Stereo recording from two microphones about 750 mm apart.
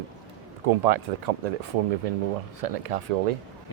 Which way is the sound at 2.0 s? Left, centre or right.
Right.